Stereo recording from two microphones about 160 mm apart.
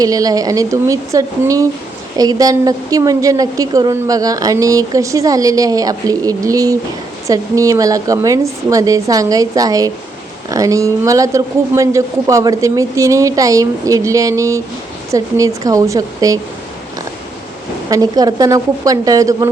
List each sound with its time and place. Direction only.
0.0 s a woman's voice: 20° right (ahead or behind)
17.8 s a woman's voice: 25° right (ahead or behind)